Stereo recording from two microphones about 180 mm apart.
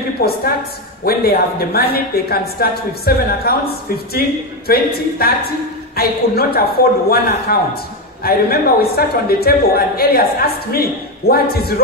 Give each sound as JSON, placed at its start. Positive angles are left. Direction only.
{"t": 0.2, "sound": "a man's voice", "side_deg": 55}